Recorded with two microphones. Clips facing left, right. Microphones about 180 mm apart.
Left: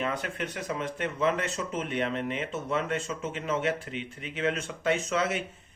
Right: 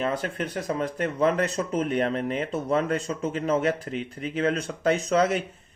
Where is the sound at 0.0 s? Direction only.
35° right (ahead or behind).